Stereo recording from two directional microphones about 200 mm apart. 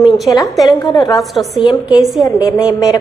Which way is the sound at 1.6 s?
20° left (ahead or behind).